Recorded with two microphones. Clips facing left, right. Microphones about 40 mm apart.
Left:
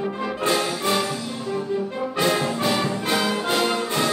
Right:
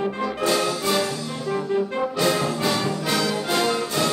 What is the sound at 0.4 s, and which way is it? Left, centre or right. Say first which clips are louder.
Music: even; left.